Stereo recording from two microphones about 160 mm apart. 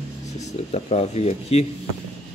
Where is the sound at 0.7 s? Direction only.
45° left (ahead or behind).